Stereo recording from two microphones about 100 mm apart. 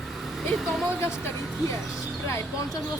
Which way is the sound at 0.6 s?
5° right (ahead or behind).